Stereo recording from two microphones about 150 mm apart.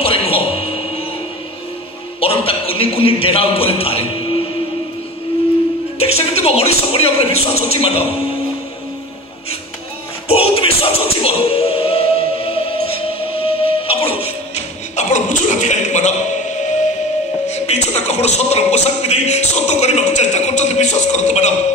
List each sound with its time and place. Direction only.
0.0 s a sound: 40° left (ahead or behind)
2.2 s a man's voice: 40° left (ahead or behind)
5.9 s a man's voice: 40° left (ahead or behind)
10.2 s music: 40° left (ahead or behind)